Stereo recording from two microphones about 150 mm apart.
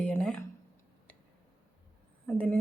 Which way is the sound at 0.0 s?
5° left (ahead or behind).